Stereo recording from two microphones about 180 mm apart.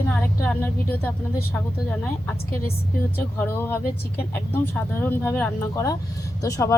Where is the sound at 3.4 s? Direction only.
10° left (ahead or behind).